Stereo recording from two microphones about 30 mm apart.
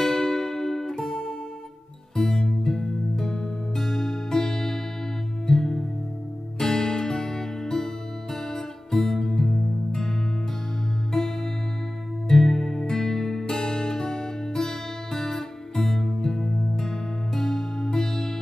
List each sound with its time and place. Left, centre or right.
0.0 s music: centre
2.1 s music: centre
11.1 s music: centre